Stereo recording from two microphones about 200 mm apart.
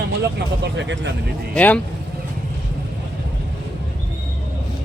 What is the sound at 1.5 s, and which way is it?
Speech, 5° left (ahead or behind).